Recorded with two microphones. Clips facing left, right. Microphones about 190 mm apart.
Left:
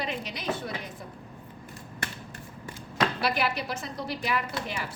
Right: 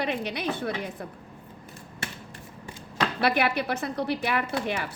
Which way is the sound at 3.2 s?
60° right (ahead or behind).